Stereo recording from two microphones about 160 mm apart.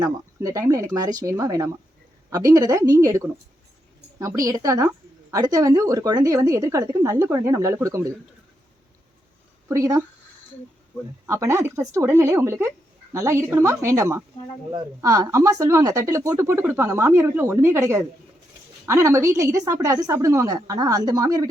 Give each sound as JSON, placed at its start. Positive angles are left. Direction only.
{"t": 0.0, "sound": "a woman's voice", "side_deg": -20}
{"t": 9.6, "sound": "a woman's voice", "side_deg": -20}
{"t": 11.3, "sound": "a woman's voice", "side_deg": -15}